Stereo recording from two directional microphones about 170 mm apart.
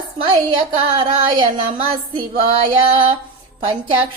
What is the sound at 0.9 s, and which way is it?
A woman's voice, 25° right (ahead or behind).